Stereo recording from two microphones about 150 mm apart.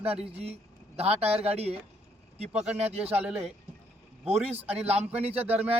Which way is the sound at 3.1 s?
10° right (ahead or behind).